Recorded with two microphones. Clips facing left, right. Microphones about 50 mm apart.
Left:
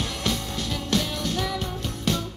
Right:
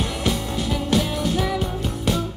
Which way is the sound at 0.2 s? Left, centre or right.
Centre.